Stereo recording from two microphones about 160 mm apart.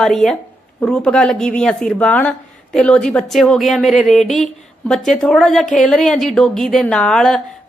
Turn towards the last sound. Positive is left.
turn(degrees=5)  # may be behind; listen again after turning